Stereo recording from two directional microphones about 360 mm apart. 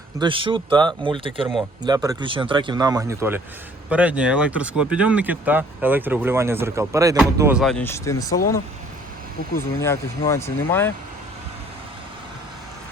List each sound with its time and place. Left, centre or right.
0.2 s speech: centre
9.6 s speech: centre